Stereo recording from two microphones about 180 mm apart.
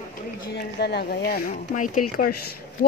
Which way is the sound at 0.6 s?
65° left (ahead or behind).